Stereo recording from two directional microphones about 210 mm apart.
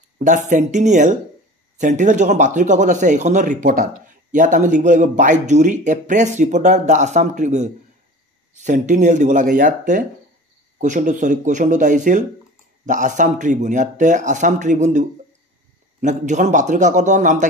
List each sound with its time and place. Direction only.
0.2 s speech: 35° right (ahead or behind)